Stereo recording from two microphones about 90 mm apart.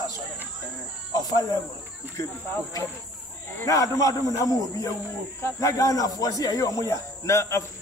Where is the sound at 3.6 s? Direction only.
40° left (ahead or behind).